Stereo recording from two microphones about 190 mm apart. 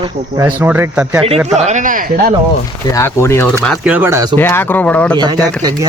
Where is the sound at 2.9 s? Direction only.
15° left (ahead or behind).